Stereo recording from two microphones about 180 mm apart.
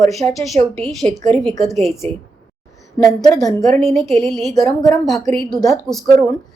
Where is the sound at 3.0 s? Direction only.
20° left (ahead or behind).